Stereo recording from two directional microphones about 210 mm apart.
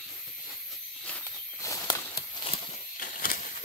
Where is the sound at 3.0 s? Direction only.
45° left (ahead or behind).